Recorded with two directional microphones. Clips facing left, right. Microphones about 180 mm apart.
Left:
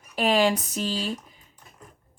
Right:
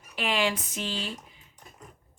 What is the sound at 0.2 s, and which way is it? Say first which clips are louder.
Speech: left 6 dB; 40° left (ahead or behind).